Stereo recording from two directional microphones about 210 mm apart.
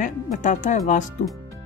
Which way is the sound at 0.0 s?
35° left (ahead or behind).